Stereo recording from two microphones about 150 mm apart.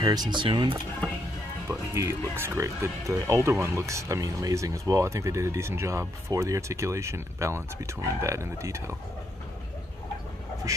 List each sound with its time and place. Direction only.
0.0 s speech: 25° right (ahead or behind)
1.7 s speech: 20° right (ahead or behind)
10.7 s a sound: 20° right (ahead or behind)